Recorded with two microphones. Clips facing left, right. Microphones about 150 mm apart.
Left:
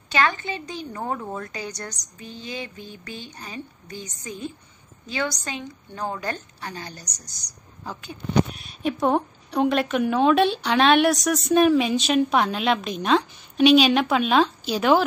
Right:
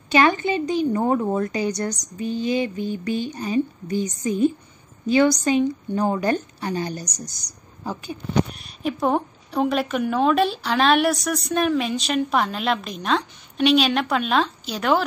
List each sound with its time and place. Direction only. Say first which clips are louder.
0.1 s a woman's voice: right 6 dB; 15° right (ahead or behind); by 15.0 s 5° left (ahead or behind)